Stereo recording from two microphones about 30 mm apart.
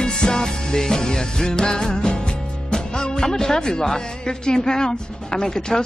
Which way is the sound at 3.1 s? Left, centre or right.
Centre.